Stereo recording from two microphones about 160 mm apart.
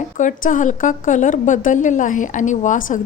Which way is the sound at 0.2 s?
55° left (ahead or behind).